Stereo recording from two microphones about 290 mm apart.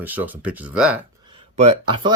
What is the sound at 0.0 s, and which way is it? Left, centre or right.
Speech, centre.